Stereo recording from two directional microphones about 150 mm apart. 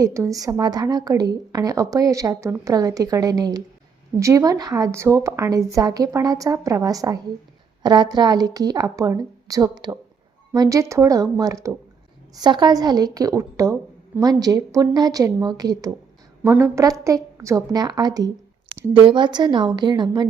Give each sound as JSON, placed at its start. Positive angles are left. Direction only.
{"t": 0.0, "sound": "speech", "side_deg": -20}